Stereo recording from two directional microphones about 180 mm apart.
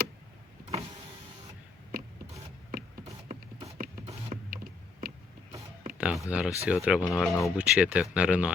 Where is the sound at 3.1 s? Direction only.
35° right (ahead or behind).